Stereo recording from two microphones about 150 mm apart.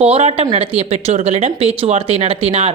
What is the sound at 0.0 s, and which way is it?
A woman's voice, 45° right (ahead or behind).